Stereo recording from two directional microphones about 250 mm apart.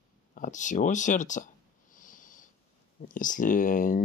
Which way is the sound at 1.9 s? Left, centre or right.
Left.